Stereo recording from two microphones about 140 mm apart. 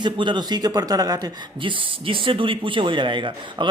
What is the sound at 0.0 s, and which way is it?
Speech, 35° right (ahead or behind).